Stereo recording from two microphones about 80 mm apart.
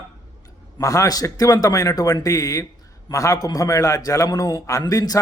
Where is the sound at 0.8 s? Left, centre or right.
Left.